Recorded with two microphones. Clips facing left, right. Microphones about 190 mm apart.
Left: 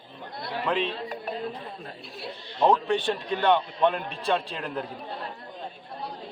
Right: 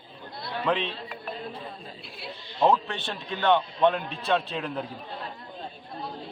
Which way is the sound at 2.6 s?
15° left (ahead or behind).